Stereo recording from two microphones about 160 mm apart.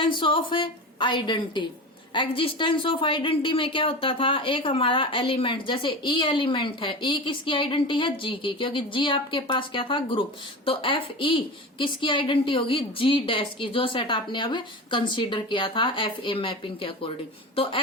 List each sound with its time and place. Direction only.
0.0 s a woman's voice: 30° left (ahead or behind)